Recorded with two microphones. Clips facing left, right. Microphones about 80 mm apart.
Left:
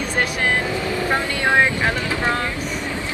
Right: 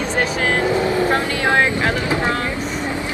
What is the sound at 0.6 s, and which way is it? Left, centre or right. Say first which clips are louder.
Vehicle: right 5 dB; right.